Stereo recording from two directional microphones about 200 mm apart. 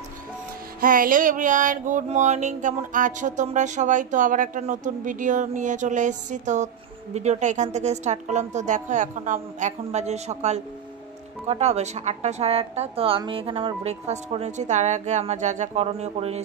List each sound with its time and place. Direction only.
0.7 s music: 45° right (ahead or behind)